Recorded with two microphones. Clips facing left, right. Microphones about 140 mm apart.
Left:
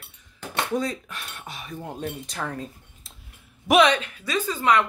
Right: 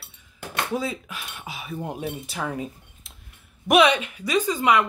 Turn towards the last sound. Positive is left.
turn(degrees=-15)  # may be behind; listen again after turning